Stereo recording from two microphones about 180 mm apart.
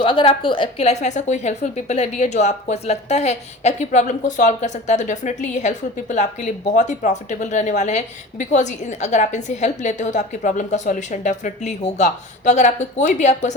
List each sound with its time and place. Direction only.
0.0 s a woman's voice: 30° left (ahead or behind)